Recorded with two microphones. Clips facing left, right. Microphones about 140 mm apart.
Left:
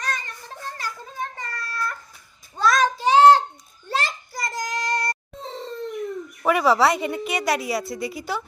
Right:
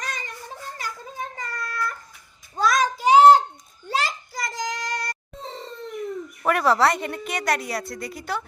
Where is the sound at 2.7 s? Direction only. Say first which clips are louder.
Even; 15° right (ahead or behind).